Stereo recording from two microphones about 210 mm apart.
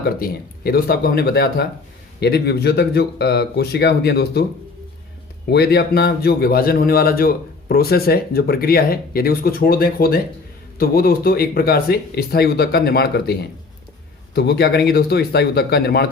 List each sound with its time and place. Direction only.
0.0 s a man's voice: 45° left (ahead or behind)
5.5 s a man's voice: 50° left (ahead or behind)